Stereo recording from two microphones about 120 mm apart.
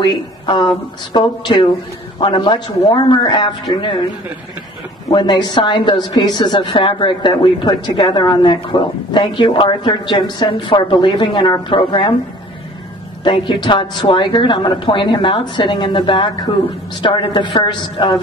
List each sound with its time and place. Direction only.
0.0 s speech: 40° left (ahead or behind)
5.1 s a woman's voice: 40° left (ahead or behind)
13.2 s a woman's voice: 40° left (ahead or behind)